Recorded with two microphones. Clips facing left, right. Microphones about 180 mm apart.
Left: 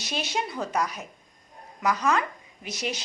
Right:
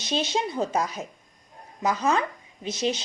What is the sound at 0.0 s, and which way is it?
Speech, 20° right (ahead or behind).